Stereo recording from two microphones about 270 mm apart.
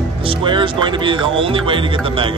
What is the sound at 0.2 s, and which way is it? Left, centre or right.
Speech, centre.